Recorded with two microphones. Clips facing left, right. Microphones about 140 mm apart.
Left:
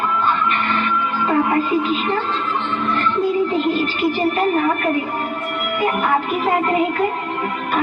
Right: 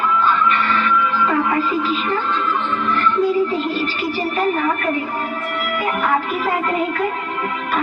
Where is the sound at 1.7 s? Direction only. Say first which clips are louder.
Left 2 dB; 55° left (ahead or behind).